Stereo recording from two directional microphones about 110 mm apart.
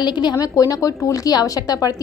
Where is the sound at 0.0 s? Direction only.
40° left (ahead or behind).